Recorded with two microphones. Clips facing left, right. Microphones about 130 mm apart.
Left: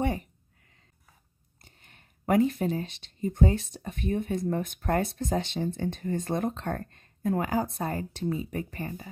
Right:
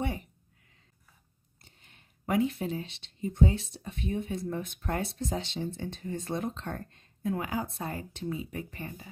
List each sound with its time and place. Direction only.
1.6 s speech: 50° left (ahead or behind)